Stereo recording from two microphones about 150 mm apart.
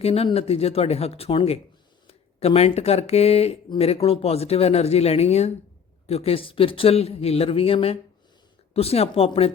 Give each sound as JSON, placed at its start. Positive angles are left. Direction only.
{"t": 0.0, "sound": "a man's voice", "side_deg": 40}